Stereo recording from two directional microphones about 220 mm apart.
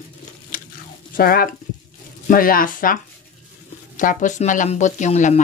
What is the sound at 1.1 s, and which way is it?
Speech, 40° left (ahead or behind).